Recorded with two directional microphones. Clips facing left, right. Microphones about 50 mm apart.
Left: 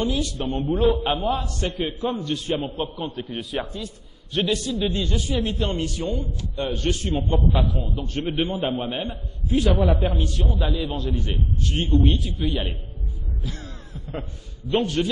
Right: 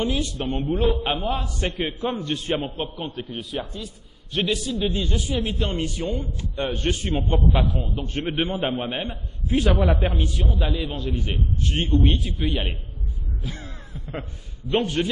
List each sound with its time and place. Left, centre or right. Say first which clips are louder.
0.0 s a man's voice: even; right
0.6 s a man's voice: left 3 dB; centre
1.6 s a man's voice: right 1 dB; right
2.6 s a man's voice: left 1 dB; centre
5.8 s a man's voice: even; right
7.9 s a man's voice: left 1 dB; right
10.1 s a man's voice: even; centre
11.6 s a man's voice: left 1 dB; right
13.4 s caw: even; right
14.1 s a man's voice: even; centre